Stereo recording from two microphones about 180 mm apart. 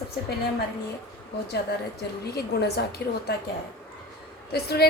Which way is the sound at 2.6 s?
65° left (ahead or behind).